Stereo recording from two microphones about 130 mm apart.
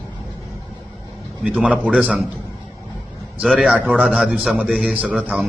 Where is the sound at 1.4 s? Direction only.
10° right (ahead or behind).